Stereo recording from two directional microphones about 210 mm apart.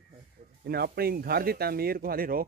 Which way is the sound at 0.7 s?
45° right (ahead or behind).